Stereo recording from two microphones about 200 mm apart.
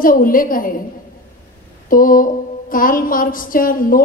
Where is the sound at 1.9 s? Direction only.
45° left (ahead or behind).